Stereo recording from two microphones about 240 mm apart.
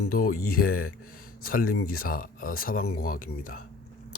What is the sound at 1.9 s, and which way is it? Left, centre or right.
Speech, left.